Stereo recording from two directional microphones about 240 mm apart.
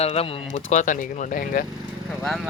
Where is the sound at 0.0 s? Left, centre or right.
Left.